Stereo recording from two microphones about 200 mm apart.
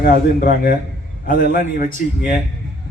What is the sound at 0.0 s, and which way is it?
A man's voice, 45° left (ahead or behind).